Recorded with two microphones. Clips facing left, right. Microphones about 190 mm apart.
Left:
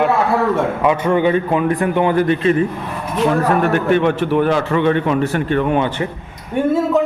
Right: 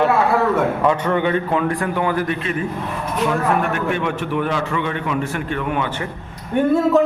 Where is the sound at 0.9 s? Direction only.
10° left (ahead or behind); by 5.9 s 30° left (ahead or behind).